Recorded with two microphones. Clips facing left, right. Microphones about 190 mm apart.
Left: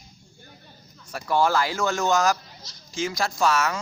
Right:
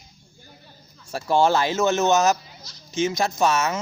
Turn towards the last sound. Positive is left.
turn(degrees=-20)  # may be behind; listen again after turning